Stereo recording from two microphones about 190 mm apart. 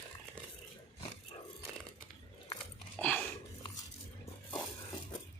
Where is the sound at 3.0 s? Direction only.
10° left (ahead or behind).